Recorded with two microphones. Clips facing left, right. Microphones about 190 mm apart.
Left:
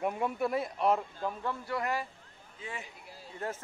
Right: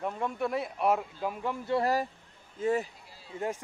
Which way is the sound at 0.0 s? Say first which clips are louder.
Left 1 dB; 10° left (ahead or behind).